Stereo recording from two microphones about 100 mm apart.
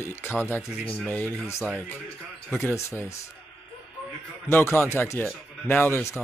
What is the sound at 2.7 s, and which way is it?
Speech, 30° left (ahead or behind).